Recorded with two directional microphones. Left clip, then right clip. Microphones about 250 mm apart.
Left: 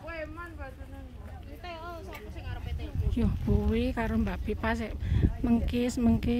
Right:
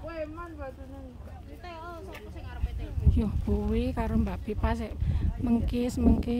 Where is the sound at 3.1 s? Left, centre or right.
Centre.